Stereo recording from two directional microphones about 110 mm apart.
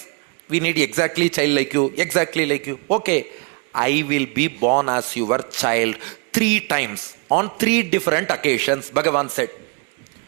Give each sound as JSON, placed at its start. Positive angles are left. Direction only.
{"t": 0.5, "sound": "a man's voice", "side_deg": -25}